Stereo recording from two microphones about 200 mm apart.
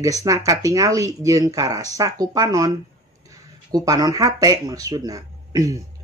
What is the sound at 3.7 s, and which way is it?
Speech, 20° right (ahead or behind).